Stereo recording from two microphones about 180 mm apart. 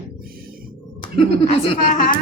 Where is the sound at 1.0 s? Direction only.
30° left (ahead or behind).